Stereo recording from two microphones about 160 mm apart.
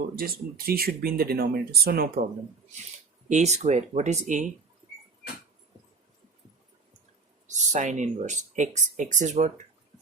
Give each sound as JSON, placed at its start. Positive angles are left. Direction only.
{"t": 0.2, "sound": "speech", "side_deg": -70}
{"t": 3.2, "sound": "speech", "side_deg": -45}
{"t": 7.4, "sound": "speech", "side_deg": -50}